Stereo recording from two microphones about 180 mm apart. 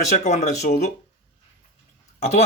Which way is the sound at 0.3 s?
40° left (ahead or behind).